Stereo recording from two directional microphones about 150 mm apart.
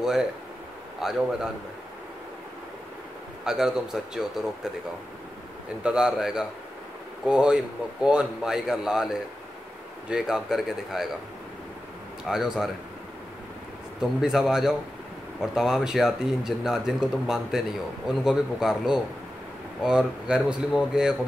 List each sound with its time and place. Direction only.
0.0 s speech: 5° right (ahead or behind)
3.4 s speech: 5° right (ahead or behind)
5.8 s speech: 5° right (ahead or behind)
12.3 s speech: 5° right (ahead or behind)
13.9 s speech: centre (ahead or behind)